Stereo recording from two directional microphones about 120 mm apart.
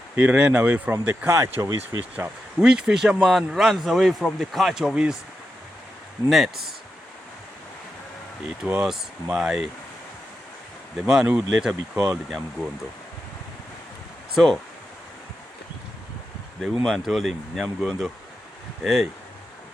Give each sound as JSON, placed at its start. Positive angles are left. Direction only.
{"t": 0.2, "sound": "speech", "side_deg": -10}
{"t": 2.1, "sound": "speech", "side_deg": -10}
{"t": 6.2, "sound": "speech", "side_deg": 0}
{"t": 8.4, "sound": "speech", "side_deg": -5}
{"t": 11.0, "sound": "speech", "side_deg": -5}
{"t": 14.3, "sound": "speech", "side_deg": 5}
{"t": 16.6, "sound": "speech", "side_deg": 0}